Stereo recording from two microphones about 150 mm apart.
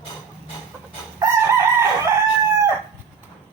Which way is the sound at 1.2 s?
20° right (ahead or behind).